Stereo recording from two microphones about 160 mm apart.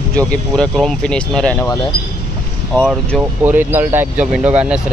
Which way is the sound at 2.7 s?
Centre (ahead or behind).